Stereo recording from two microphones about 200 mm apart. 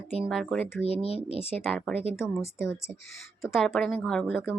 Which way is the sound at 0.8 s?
30° left (ahead or behind).